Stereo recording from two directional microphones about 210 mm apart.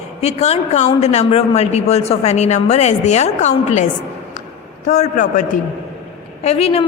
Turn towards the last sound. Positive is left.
turn(degrees=30)  # may be behind; listen again after turning